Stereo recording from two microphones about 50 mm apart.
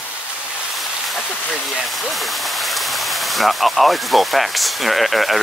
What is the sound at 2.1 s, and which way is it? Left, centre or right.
Speech, centre.